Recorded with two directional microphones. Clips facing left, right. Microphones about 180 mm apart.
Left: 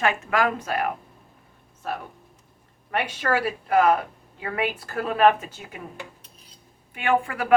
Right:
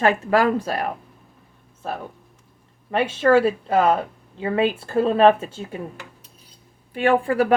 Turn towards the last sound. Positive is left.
turn(degrees=-35)  # may be behind; listen again after turning